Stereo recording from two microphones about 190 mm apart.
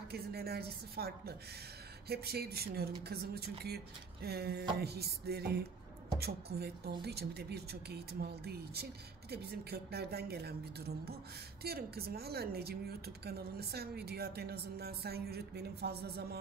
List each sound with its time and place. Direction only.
0.1 s speech: 55° right (ahead or behind)
11.6 s speech: 55° right (ahead or behind)